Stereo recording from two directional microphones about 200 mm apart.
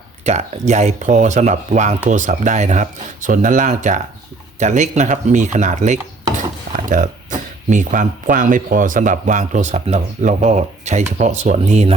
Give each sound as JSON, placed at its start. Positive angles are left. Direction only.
{"t": 0.3, "sound": "speech", "side_deg": -35}